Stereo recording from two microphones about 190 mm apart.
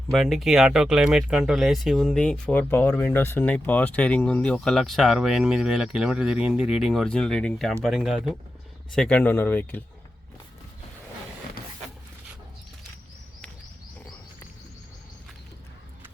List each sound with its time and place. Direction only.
0.1 s speech: centre (ahead or behind)